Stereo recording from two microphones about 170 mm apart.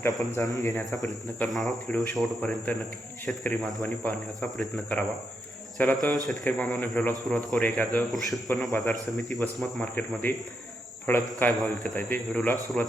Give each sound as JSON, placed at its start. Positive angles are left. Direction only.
{"t": 0.3, "sound": "a man's voice", "side_deg": 20}
{"t": 1.4, "sound": "a man's voice", "side_deg": 0}
{"t": 9.9, "sound": "a man's voice", "side_deg": 10}